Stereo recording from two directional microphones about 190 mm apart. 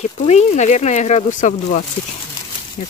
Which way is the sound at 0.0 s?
35° left (ahead or behind).